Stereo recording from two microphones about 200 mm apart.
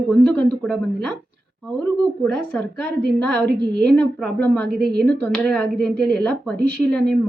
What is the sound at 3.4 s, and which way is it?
Speech, 55° right (ahead or behind).